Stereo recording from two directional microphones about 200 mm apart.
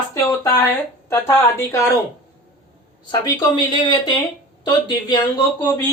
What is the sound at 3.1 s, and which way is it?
Speech, 20° left (ahead or behind).